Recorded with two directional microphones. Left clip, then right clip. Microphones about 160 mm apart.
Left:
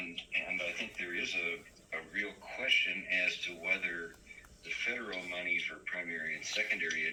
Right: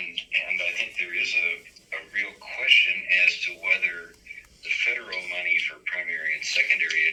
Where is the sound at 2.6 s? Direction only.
45° right (ahead or behind).